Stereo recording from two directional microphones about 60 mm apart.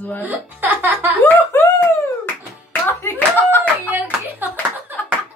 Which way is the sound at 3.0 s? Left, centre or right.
Left.